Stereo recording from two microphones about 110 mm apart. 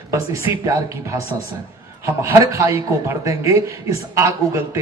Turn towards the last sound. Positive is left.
turn(degrees=-25)  # may be behind; listen again after turning